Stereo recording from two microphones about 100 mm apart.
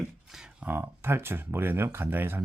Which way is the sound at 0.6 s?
25° right (ahead or behind).